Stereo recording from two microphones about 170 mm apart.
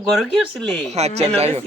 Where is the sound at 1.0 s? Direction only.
40° right (ahead or behind).